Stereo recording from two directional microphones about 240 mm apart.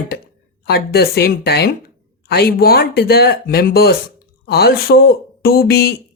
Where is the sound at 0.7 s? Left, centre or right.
Left.